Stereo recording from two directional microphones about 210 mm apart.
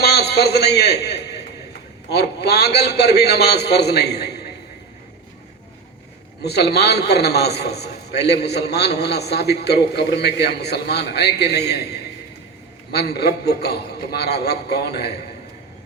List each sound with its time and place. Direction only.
0.0 s a sound: 50° left (ahead or behind)
2.0 s a man's voice: 50° left (ahead or behind)
6.4 s a man's voice: 50° left (ahead or behind)
12.9 s a man's voice: 50° left (ahead or behind)